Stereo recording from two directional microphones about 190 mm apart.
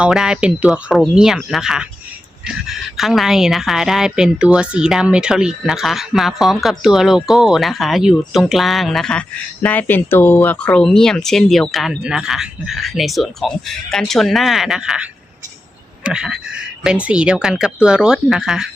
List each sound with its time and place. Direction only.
0.0 s a woman's voice: 5° right (ahead or behind)